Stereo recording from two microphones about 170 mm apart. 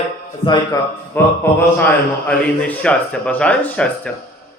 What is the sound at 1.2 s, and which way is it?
A man's voice, 10° left (ahead or behind).